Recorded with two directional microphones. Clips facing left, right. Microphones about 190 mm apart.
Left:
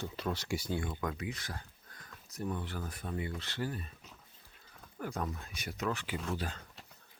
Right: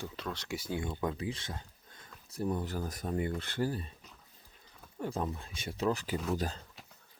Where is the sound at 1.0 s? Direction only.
30° right (ahead or behind).